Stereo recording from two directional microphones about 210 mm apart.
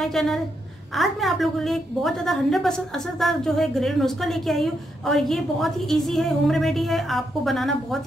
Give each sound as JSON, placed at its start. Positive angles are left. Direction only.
{"t": 0.0, "sound": "a woman's voice", "side_deg": 0}